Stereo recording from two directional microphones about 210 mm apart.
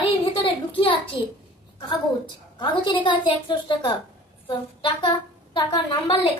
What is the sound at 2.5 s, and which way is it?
A woman's voice, 20° left (ahead or behind).